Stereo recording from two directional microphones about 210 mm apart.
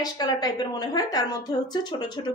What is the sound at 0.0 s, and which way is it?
A woman's voice, 20° left (ahead or behind).